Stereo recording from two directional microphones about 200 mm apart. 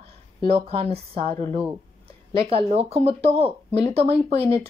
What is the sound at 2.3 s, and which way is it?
A woman's voice, 30° right (ahead or behind).